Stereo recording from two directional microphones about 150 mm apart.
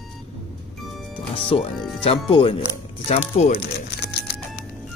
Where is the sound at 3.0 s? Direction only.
50° left (ahead or behind).